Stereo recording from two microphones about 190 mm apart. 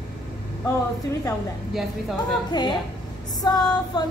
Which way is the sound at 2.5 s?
25° left (ahead or behind).